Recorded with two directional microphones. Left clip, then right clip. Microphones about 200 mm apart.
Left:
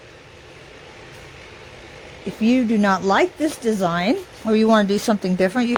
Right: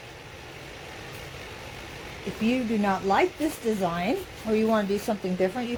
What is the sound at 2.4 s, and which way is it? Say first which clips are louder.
Speech: left 8 dB; 50° left (ahead or behind).